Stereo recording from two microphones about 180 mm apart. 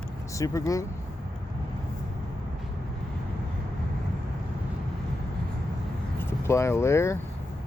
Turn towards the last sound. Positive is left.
turn(degrees=15)  # may be behind; listen again after turning